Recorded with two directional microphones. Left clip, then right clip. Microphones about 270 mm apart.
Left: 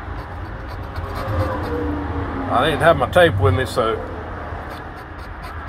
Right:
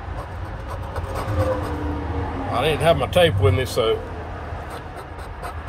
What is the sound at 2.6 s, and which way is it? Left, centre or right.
Speech, centre.